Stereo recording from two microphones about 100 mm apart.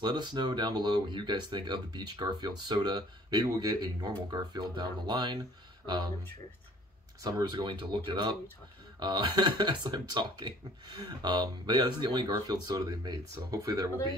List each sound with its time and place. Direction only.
0.0 s speech: 45° right (ahead or behind)
7.2 s speech: 40° right (ahead or behind)
7.6 s speech: 55° right (ahead or behind); by 13.8 s 40° right (ahead or behind)